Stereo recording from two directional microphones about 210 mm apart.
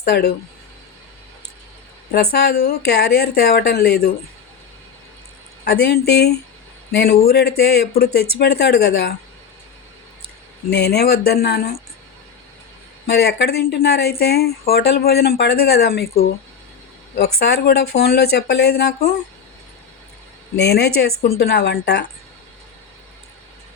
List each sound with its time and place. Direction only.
0.0 s speech: 50° left (ahead or behind)
2.1 s speech: 50° left (ahead or behind)
5.6 s speech: 50° left (ahead or behind)
10.7 s speech: 50° left (ahead or behind)
13.1 s speech: 50° left (ahead or behind)
20.6 s speech: 50° left (ahead or behind)